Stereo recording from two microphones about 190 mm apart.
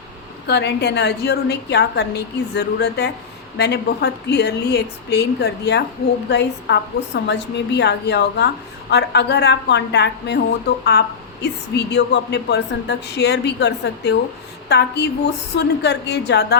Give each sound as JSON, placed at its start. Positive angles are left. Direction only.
{"t": 0.4, "sound": "speech", "side_deg": 60}